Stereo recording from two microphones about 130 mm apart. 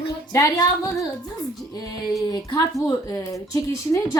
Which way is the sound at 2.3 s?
30° left (ahead or behind).